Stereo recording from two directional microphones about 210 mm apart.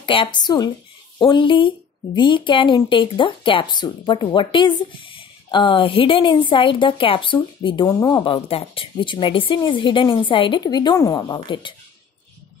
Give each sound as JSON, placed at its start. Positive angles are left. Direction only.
{"t": 0.0, "sound": "a woman's voice", "side_deg": 25}